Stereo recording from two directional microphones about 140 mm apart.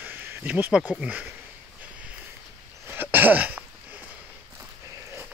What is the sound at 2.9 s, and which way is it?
Throat clearing, 15° right (ahead or behind).